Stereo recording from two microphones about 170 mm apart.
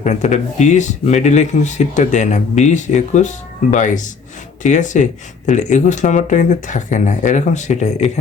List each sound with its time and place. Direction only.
0.0 s speech: 45° left (ahead or behind)